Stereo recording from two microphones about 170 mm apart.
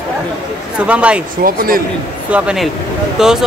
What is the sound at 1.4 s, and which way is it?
Speech, 60° right (ahead or behind).